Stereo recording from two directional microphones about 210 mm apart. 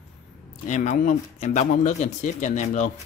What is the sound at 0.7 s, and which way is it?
Speech, 35° left (ahead or behind).